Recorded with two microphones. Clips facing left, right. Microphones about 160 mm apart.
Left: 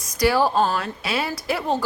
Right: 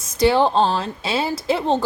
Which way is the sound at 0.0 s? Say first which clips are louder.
Right 3 dB; 25° right (ahead or behind).